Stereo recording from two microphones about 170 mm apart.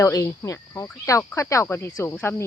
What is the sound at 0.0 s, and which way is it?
Cricket, 15° left (ahead or behind).